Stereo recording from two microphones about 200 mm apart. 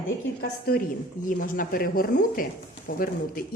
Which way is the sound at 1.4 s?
45° left (ahead or behind).